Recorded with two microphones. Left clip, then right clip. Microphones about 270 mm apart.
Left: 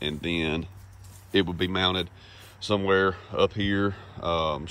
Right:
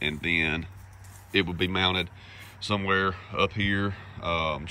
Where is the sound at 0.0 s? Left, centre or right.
Centre.